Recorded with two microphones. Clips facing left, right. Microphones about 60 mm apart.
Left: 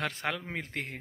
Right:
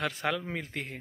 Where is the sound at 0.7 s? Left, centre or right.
Left.